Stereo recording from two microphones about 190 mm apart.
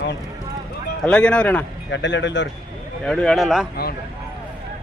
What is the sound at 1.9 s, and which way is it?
Speech, 70° left (ahead or behind).